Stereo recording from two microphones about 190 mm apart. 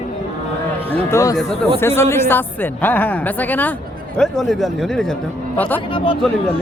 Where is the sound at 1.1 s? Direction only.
15° left (ahead or behind).